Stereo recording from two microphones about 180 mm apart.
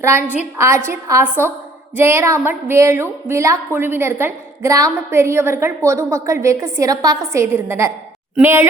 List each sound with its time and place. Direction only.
0.0 s a woman's voice: 15° right (ahead or behind)